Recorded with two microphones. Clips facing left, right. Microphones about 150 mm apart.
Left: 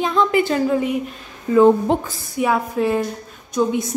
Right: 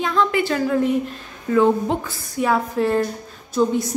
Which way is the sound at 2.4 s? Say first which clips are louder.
Left 1 dB; 5° left (ahead or behind).